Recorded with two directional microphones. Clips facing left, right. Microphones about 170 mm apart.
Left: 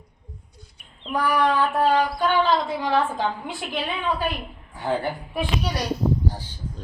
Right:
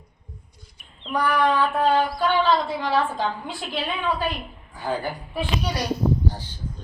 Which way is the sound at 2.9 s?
20° left (ahead or behind).